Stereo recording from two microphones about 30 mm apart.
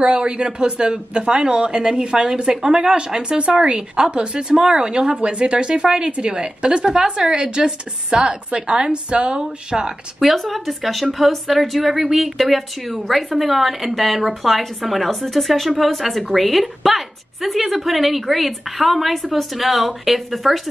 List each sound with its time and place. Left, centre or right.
0.0 s speech: right
10.2 s a woman's voice: centre